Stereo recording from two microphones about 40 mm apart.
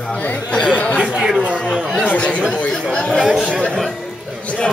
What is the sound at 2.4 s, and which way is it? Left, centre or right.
Speech, left.